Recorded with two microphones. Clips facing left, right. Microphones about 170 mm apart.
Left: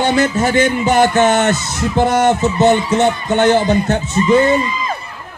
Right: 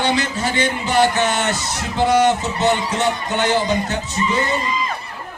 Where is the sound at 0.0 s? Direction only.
45° left (ahead or behind).